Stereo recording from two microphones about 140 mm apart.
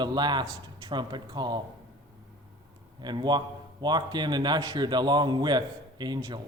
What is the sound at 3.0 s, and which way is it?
A man's voice, 30° right (ahead or behind).